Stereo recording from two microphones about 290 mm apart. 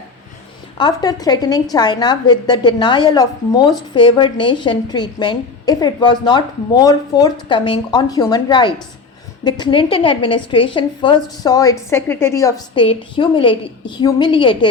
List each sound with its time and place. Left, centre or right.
0.8 s a woman's voice: centre